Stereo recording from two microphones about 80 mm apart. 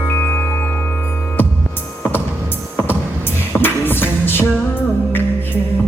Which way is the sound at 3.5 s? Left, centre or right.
Left.